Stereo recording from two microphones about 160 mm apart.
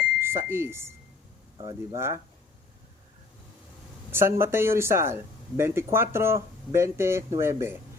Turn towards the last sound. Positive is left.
turn(degrees=-15)  # may be behind; listen again after turning